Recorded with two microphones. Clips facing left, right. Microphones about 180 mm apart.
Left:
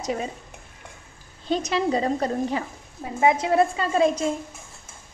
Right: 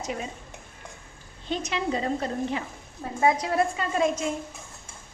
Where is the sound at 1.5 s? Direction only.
35° left (ahead or behind).